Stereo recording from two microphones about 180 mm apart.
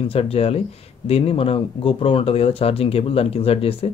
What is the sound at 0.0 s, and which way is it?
Speech, 35° left (ahead or behind).